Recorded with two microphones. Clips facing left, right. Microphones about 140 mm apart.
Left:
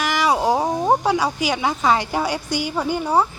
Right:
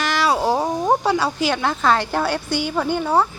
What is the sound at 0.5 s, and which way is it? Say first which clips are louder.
Speech: even; 5° left (ahead or behind).